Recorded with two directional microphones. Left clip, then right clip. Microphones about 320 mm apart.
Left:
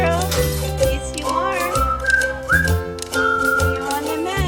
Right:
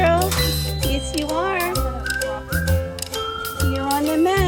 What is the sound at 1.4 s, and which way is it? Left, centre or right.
Music, centre.